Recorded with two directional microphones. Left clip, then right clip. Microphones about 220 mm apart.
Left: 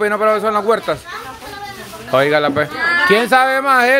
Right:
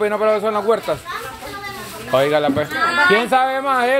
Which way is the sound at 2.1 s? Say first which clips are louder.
Left 2 dB; 25° left (ahead or behind).